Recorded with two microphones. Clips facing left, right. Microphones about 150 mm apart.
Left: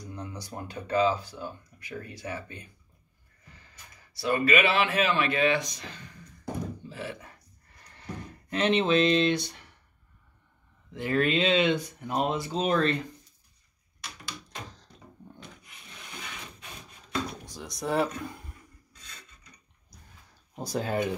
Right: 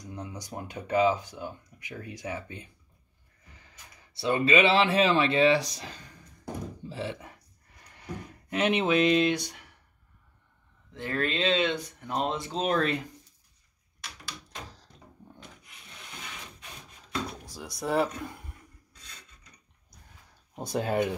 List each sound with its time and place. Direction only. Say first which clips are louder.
0.0 s speech: even; 20° right (ahead or behind)
4.2 s speech: right 1 dB; 25° right (ahead or behind)
6.9 s a sound: right 3 dB; 25° right (ahead or behind); by 9.7 s 10° right (ahead or behind)
10.9 s speech: left 4 dB; 15° left (ahead or behind); by 13.0 s 5° right (ahead or behind)
14.5 s door: left 1 dB; 5° right (ahead or behind)
17.3 s drawer open or close: left 1 dB; 5° right (ahead or behind)
20.5 s speech: right 2 dB; centre (ahead or behind)